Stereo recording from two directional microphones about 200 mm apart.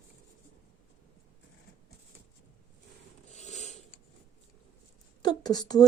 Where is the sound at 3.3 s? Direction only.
35° left (ahead or behind).